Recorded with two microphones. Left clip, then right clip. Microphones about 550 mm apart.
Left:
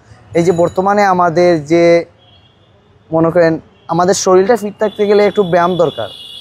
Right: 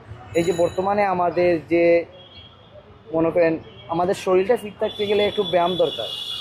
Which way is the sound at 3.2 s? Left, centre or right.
Left.